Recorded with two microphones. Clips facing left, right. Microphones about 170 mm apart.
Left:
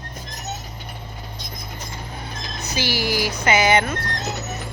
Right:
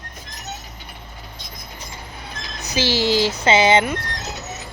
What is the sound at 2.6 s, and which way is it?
Speech, 20° right (ahead or behind).